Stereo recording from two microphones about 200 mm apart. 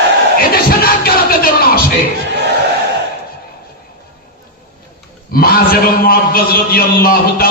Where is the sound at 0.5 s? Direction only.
50° left (ahead or behind).